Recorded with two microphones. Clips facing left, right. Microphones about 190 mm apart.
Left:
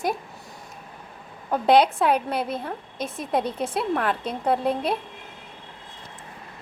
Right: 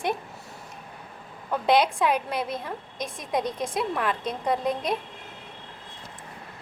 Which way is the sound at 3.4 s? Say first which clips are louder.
Left 2 dB; 5° left (ahead or behind).